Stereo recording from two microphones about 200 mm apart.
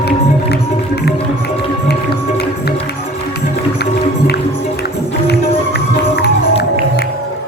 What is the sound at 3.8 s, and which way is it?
Music, 55° left (ahead or behind).